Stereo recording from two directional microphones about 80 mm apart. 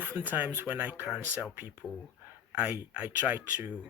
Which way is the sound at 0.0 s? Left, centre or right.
Right.